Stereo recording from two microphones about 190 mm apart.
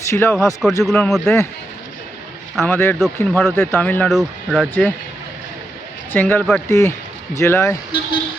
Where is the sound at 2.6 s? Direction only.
10° left (ahead or behind).